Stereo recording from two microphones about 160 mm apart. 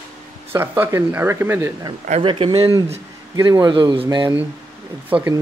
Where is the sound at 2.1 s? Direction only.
35° right (ahead or behind).